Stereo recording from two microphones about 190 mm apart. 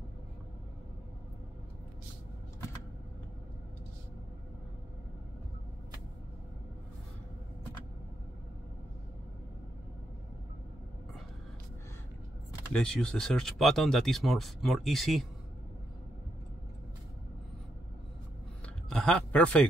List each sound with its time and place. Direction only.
12.7 s speech: 5° left (ahead or behind)
18.9 s speech: 5° left (ahead or behind)